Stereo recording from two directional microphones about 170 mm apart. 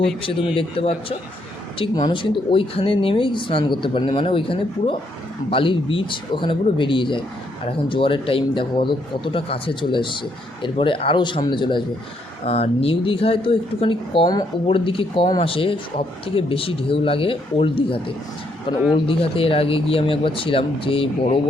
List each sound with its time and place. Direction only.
0.5 s speech: 35° left (ahead or behind)
19.0 s speech: 35° left (ahead or behind)